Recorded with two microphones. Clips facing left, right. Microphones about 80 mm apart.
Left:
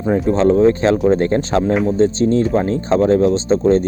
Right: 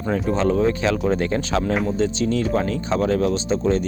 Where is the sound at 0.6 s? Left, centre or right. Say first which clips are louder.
Left 7 dB; left.